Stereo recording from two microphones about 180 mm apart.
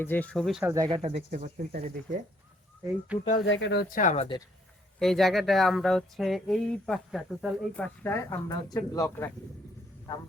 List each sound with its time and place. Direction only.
0.0 s speech: 10° left (ahead or behind)
0.6 s speech: 20° right (ahead or behind)
0.9 s speech: 30° right (ahead or behind)
1.3 s speech: 50° right (ahead or behind)
3.1 s speech: 5° right (ahead or behind)
3.4 s speech: 85° left; by 4.3 s 40° left (ahead or behind)
4.9 s speech: centre (ahead or behind)
8.0 s speech: 15° left (ahead or behind)